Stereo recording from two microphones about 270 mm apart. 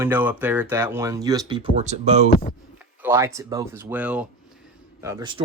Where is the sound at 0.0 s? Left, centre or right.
Centre; by 2.2 s right.